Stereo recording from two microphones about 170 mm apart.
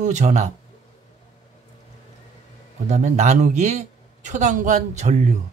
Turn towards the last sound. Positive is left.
turn(degrees=-45)  # may be behind; listen again after turning